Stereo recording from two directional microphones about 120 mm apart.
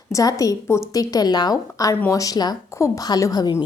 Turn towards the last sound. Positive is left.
turn(degrees=30)  # may be behind; listen again after turning